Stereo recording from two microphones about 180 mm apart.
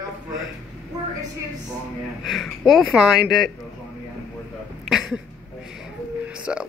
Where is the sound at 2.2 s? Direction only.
Centre (ahead or behind).